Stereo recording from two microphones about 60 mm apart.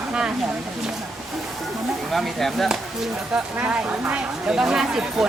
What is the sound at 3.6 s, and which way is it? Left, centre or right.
Speech, right.